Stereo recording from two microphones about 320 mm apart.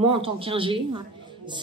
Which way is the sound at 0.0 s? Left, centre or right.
Centre.